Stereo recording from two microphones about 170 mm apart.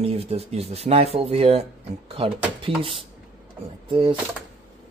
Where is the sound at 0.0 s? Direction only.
35° right (ahead or behind).